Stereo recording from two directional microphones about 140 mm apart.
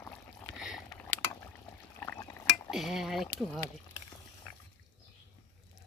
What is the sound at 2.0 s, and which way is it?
Stir, 20° left (ahead or behind).